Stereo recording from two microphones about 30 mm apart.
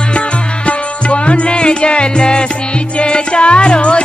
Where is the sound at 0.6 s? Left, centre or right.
Left.